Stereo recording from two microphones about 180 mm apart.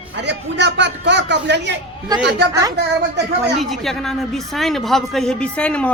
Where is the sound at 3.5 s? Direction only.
Centre (ahead or behind).